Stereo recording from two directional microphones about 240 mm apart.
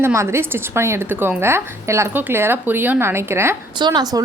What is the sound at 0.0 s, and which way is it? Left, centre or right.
A woman's voice, centre.